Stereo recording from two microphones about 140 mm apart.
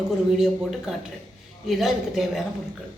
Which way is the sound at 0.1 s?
5° right (ahead or behind).